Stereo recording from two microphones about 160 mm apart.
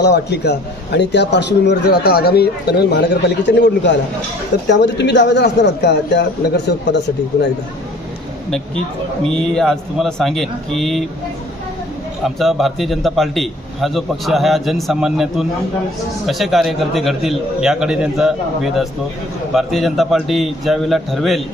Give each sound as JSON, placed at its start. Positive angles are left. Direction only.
{"t": 0.0, "sound": "a man's voice", "side_deg": 90}
{"t": 9.3, "sound": "a man's voice", "side_deg": 0}
{"t": 12.2, "sound": "a man's voice", "side_deg": 0}